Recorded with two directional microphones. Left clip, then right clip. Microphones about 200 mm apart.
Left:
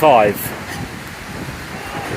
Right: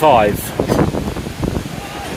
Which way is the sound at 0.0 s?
5° right (ahead or behind).